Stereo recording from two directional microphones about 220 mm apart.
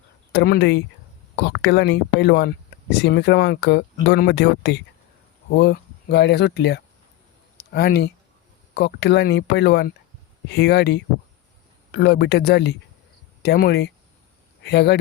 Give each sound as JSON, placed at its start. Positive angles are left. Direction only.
{"t": 0.3, "sound": "speech", "side_deg": 45}